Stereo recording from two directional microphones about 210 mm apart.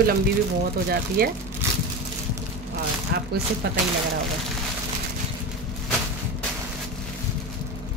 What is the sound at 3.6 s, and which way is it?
Speech, 50° right (ahead or behind).